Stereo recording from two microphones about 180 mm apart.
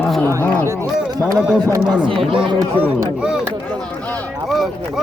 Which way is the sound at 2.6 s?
15° right (ahead or behind).